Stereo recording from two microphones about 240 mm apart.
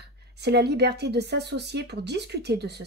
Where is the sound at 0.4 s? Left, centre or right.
Right.